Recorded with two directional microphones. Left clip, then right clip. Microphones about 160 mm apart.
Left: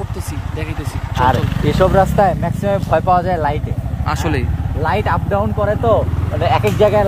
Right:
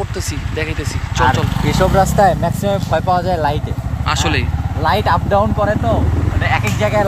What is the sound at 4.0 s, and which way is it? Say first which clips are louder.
Speech: right 3 dB; 25° left (ahead or behind).